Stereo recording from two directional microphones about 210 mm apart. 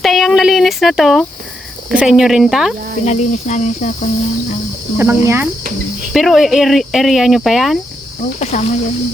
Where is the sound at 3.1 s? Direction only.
35° left (ahead or behind).